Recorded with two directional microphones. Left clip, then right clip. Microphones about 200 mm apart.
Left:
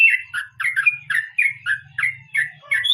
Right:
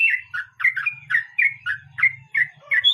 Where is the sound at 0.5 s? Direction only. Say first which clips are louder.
Right 1 dB; 15° right (ahead or behind).